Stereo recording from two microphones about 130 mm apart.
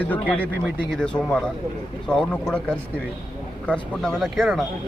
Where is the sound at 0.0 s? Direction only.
10° left (ahead or behind).